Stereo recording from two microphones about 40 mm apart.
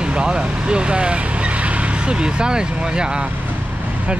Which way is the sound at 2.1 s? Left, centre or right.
Right.